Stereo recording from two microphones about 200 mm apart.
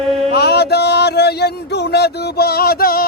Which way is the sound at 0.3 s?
55° left (ahead or behind).